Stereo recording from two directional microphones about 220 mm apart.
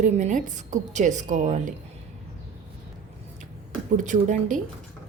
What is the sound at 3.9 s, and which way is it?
Speech, 35° right (ahead or behind).